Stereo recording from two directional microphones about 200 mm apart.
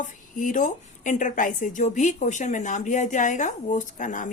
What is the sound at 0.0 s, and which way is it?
A woman's voice, 40° left (ahead or behind).